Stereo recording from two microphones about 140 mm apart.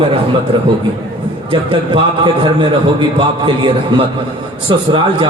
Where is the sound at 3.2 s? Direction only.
35° right (ahead or behind).